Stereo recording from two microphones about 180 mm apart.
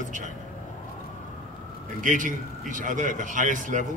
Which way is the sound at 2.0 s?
45° right (ahead or behind).